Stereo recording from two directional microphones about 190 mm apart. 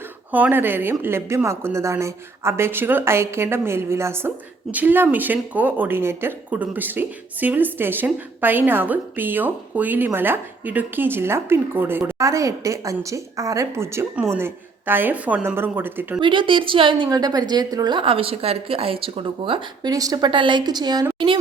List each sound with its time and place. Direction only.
0.3 s speech: 10° right (ahead or behind)
16.2 s a woman's voice: 25° right (ahead or behind)